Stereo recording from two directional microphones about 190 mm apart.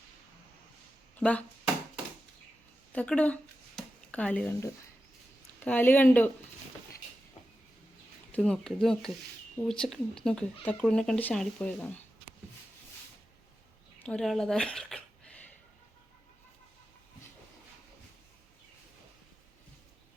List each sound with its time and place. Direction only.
1.1 s speech: 5° left (ahead or behind)
2.9 s speech: 5° left (ahead or behind)
3.8 s a sound: 5° left (ahead or behind)
5.5 s speech: 10° left (ahead or behind)
8.3 s speech: 5° left (ahead or behind)
14.0 s speech: 5° left (ahead or behind)